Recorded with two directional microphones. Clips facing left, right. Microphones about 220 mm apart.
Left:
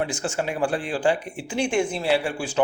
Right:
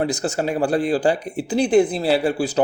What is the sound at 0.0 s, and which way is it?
A man's voice, 40° right (ahead or behind).